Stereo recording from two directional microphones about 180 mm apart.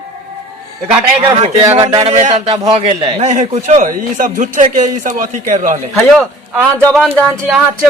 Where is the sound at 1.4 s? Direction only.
35° right (ahead or behind).